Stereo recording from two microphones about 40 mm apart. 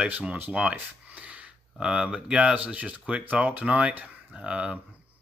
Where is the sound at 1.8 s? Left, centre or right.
Right.